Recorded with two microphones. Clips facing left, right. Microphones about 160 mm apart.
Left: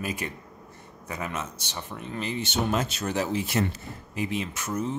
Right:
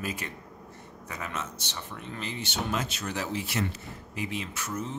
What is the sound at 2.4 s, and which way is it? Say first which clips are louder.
Speech: left 4 dB; 45° left (ahead or behind).